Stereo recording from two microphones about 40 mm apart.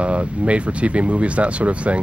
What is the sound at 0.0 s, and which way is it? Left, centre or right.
Speech, right.